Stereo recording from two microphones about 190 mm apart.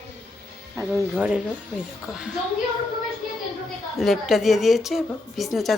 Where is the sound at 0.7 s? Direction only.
10° right (ahead or behind).